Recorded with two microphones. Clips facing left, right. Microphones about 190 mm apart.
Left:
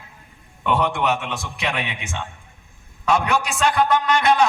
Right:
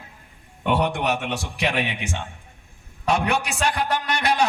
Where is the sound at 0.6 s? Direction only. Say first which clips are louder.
Left 1 dB; 65° right (ahead or behind).